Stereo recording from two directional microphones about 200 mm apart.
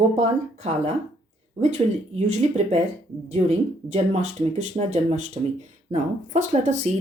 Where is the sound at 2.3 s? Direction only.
35° right (ahead or behind).